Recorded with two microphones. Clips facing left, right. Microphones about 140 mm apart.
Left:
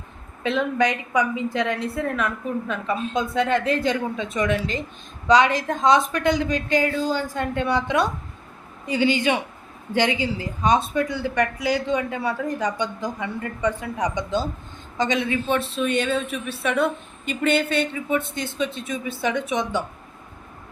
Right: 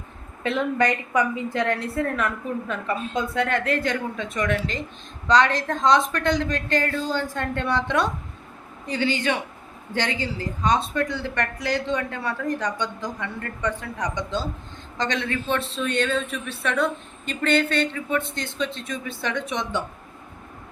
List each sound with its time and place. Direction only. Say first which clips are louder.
0.5 s a man's voice: left 1 dB; 15° left (ahead or behind)
5.3 s a woman's voice: left 2 dB; 5° left (ahead or behind)